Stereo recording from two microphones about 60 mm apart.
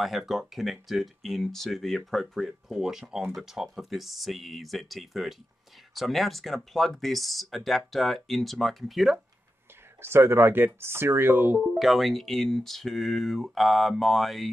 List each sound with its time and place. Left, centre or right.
0.0 s speech: centre
10.0 s speech: right
11.8 s speech: centre